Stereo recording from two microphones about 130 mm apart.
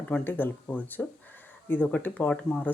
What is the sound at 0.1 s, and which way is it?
Speech, 15° left (ahead or behind).